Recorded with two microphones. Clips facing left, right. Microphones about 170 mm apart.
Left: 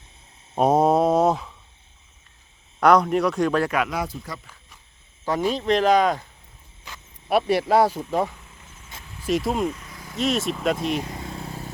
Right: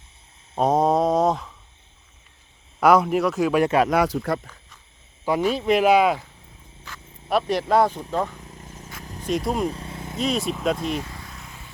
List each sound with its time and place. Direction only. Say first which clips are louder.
0.5 s a sound: left 1 dB; 10° left (ahead or behind)
2.8 s speech: even; 5° right (ahead or behind)
3.6 s speech: right 4 dB; 30° right (ahead or behind)
3.9 s speech: right 8 dB; 75° right (ahead or behind)
5.5 s speech: right 1 dB; 10° right (ahead or behind)
6.8 s speech: left 1 dB; 15° left (ahead or behind)
8.4 s a sound: right 8 dB; 40° right (ahead or behind)
9.2 s speech: left 1 dB; centre (ahead or behind)
9.6 s vehicle: right 1 dB; 30° right (ahead or behind)
10.2 s speech: left 1 dB; centre (ahead or behind)
11.0 s vehicle: left 7 dB; 20° left (ahead or behind)